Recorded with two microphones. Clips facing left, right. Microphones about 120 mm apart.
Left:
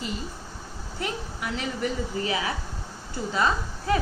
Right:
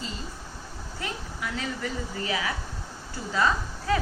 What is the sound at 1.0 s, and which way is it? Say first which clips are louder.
A woman's voice: left 3 dB; 20° left (ahead or behind).